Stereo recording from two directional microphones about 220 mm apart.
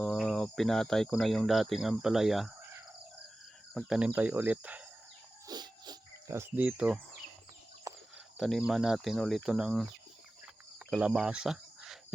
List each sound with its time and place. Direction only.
0.0 s speech: centre (ahead or behind)
3.8 s speech: 5° right (ahead or behind)
5.5 s a sound: 20° right (ahead or behind)
7.9 s cricket: 15° right (ahead or behind)
8.4 s speech: centre (ahead or behind)
10.4 s cricket: 5° right (ahead or behind)